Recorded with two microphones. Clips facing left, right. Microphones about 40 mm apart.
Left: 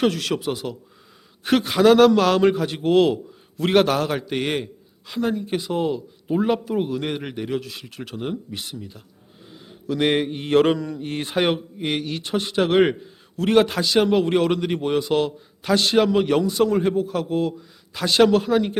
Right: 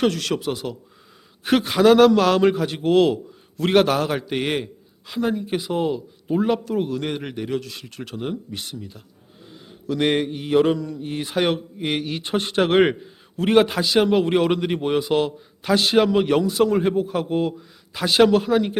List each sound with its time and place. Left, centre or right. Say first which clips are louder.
0.0 s a man's voice: even; centre
9.5 s mantra: even; centre
10.3 s mantra: left 2 dB; left
10.8 s a man's voice: even; centre
11.0 s a man's voice: even; centre
11.9 s a man's voice: even; centre
12.2 s speech: right 1 dB; right
12.8 s a man's voice: even; centre